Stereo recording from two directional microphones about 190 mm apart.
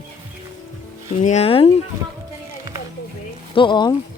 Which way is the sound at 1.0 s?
35° left (ahead or behind).